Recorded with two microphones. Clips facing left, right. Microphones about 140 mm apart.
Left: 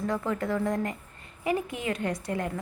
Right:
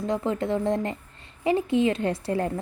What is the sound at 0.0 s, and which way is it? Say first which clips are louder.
A woman's voice: right 3 dB; 25° right (ahead or behind).